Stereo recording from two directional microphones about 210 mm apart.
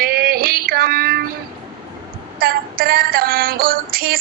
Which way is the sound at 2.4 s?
45° right (ahead or behind).